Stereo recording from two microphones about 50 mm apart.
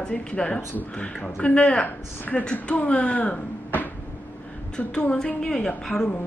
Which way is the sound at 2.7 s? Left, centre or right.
Left.